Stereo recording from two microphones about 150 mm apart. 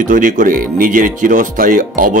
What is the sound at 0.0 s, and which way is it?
Speech, 60° right (ahead or behind).